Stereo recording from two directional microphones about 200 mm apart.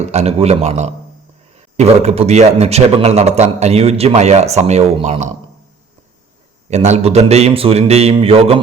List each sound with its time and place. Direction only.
0.0 s a man's voice: 35° right (ahead or behind)
6.7 s a man's voice: 35° right (ahead or behind)